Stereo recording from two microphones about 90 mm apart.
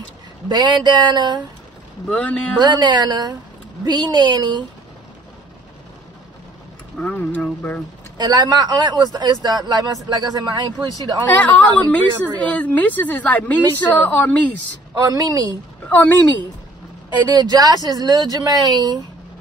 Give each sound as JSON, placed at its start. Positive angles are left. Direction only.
{"t": 0.5, "sound": "speech", "side_deg": -50}
{"t": 2.0, "sound": "a woman's voice", "side_deg": 15}
{"t": 2.6, "sound": "a woman's voice", "side_deg": -50}
{"t": 7.0, "sound": "a woman's voice", "side_deg": 15}
{"t": 8.2, "sound": "speech", "side_deg": -45}
{"t": 11.2, "sound": "a woman's voice", "side_deg": 20}
{"t": 15.0, "sound": "speech", "side_deg": -45}
{"t": 15.9, "sound": "a woman's voice", "side_deg": 20}
{"t": 17.3, "sound": "speech", "side_deg": -50}